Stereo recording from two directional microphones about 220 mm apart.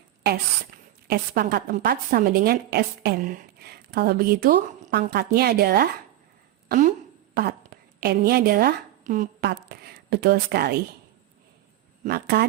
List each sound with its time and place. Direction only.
1.0 s a woman's voice: 45° right (ahead or behind)
6.7 s a woman's voice: 35° right (ahead or behind)
12.0 s a woman's voice: 45° right (ahead or behind)